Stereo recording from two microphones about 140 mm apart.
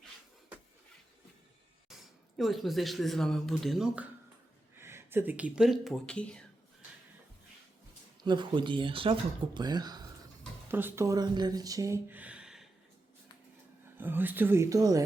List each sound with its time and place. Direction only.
1.9 s speech: centre (ahead or behind)
4.8 s speech: 20° right (ahead or behind); by 6.4 s 5° left (ahead or behind)
8.2 s speech: 30° right (ahead or behind)
10.7 s speech: 15° right (ahead or behind)
14.0 s speech: 15° right (ahead or behind)